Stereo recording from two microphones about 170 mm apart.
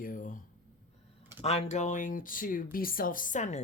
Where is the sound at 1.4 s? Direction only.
40° left (ahead or behind).